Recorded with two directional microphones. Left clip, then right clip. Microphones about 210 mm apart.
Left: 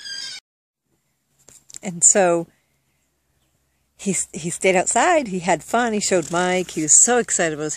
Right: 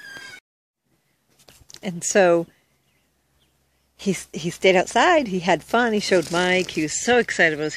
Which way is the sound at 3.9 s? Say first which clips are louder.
Even; 10° left (ahead or behind).